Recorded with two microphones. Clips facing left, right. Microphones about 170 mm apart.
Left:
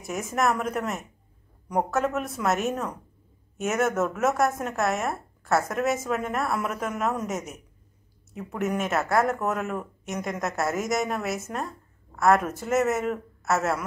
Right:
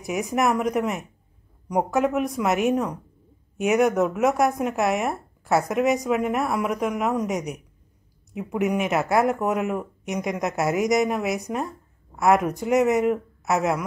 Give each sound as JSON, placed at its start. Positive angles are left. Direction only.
{"t": 0.3, "sound": "speech", "side_deg": -15}